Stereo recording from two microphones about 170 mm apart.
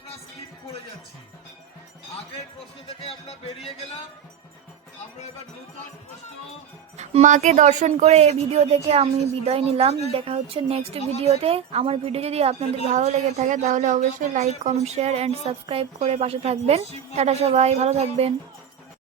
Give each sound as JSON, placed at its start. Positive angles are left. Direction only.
{"t": 3.0, "sound": "speech", "side_deg": 35}
{"t": 6.9, "sound": "a woman's voice", "side_deg": -40}